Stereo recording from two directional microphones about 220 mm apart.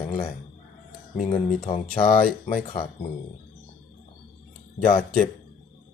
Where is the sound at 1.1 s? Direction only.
30° left (ahead or behind).